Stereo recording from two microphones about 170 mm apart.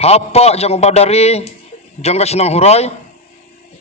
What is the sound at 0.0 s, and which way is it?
A man's voice, 35° left (ahead or behind).